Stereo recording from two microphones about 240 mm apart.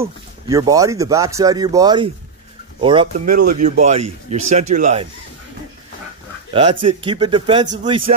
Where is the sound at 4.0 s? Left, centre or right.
Right.